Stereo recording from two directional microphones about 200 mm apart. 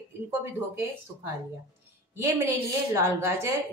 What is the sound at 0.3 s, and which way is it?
Speech, 10° right (ahead or behind).